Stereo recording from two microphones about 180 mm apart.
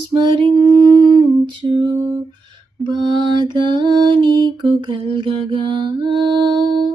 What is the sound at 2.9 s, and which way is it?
Female singing, 25° right (ahead or behind).